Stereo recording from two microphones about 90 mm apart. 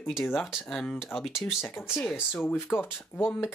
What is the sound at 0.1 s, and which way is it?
Speech, centre (ahead or behind).